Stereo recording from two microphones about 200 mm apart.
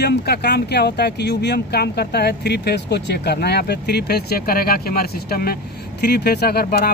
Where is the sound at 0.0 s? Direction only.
55° left (ahead or behind).